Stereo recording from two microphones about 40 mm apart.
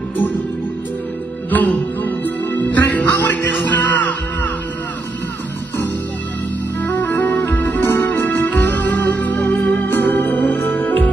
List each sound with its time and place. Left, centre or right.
1.5 s music: left
6.8 s music: left
7.5 s music: left
9.6 s organ: left
9.8 s music: left
10.1 s music: left